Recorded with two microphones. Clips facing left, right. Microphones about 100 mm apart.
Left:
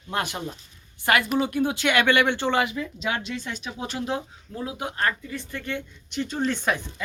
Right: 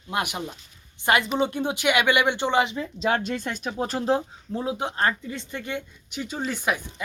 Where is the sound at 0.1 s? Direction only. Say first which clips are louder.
Right 1 dB; 15° right (ahead or behind).